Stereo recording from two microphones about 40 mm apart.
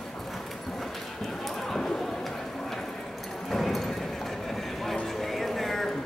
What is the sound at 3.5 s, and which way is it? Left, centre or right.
Clip-clop, centre.